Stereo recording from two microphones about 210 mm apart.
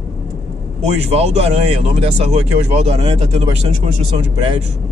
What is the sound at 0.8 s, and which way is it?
Speech, 30° right (ahead or behind).